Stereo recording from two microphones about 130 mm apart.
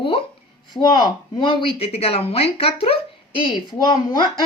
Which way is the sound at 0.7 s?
30° left (ahead or behind).